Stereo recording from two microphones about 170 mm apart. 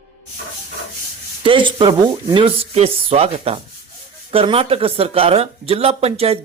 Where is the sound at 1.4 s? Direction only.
30° right (ahead or behind).